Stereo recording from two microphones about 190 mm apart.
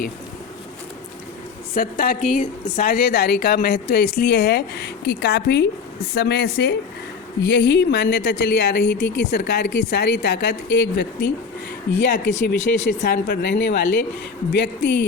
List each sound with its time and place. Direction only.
1.7 s a woman's voice: 50° left (ahead or behind)